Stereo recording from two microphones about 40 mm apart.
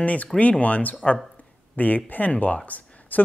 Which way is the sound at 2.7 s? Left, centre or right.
Left.